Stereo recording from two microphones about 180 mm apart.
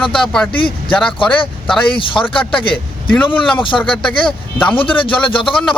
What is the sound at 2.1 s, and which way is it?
Speech, 5° left (ahead or behind).